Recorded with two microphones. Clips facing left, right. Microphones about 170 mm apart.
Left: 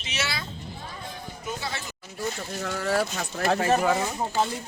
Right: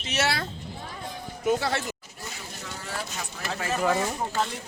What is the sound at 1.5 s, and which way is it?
Speech, 70° right (ahead or behind).